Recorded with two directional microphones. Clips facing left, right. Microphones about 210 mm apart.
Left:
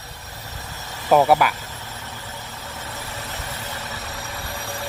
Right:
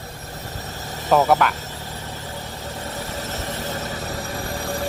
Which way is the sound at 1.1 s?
10° left (ahead or behind).